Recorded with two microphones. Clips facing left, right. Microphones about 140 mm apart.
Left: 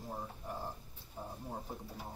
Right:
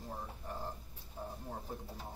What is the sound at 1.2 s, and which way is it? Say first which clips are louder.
Speech: even; 15° left (ahead or behind).